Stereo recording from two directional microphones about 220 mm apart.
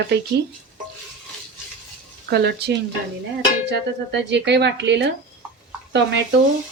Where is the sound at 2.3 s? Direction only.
50° right (ahead or behind).